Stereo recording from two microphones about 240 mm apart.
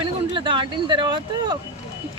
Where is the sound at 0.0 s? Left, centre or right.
Right.